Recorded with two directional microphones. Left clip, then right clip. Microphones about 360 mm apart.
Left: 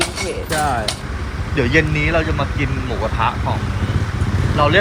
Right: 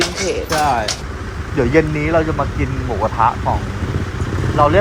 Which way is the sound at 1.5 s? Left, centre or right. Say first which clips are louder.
Right 2 dB; centre.